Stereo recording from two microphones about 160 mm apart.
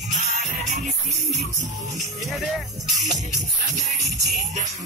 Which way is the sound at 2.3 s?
Centre (ahead or behind).